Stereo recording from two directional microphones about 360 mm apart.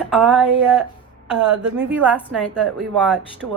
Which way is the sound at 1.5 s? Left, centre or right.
Centre.